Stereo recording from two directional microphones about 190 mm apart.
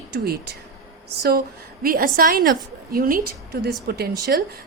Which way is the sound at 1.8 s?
50° right (ahead or behind).